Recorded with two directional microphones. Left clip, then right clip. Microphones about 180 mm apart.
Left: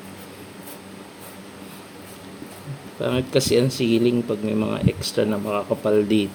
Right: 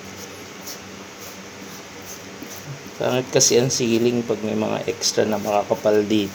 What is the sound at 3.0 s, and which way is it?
Speech, 50° left (ahead or behind).